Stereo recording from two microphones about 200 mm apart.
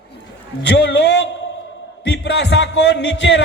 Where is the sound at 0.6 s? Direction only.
60° left (ahead or behind).